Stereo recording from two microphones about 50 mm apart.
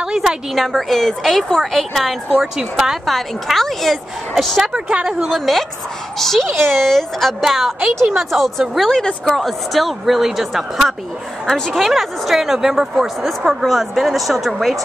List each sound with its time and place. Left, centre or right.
0.6 s speech: centre
2.3 s speech: centre
4.7 s speech: centre
5.3 s a child's voice: centre
7.8 s a woman's voice: centre
9.0 s a woman's voice: centre